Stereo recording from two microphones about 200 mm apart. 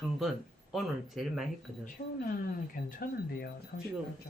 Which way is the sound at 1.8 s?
45° left (ahead or behind).